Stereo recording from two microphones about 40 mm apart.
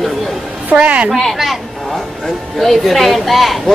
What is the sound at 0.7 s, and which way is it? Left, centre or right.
Speech, right.